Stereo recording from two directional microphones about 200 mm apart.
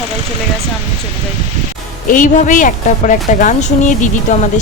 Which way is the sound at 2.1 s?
40° left (ahead or behind).